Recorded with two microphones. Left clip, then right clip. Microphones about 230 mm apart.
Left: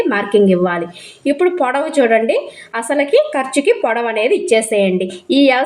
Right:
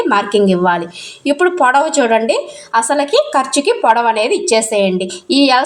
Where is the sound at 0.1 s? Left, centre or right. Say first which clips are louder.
Right 3 dB; centre.